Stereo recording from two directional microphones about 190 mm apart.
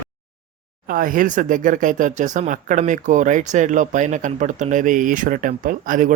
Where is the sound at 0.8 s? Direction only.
45° right (ahead or behind).